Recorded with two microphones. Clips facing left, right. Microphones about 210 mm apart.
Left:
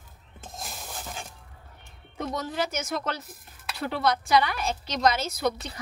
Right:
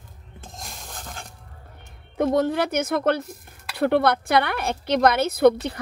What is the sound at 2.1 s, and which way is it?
A woman's voice, 60° right (ahead or behind).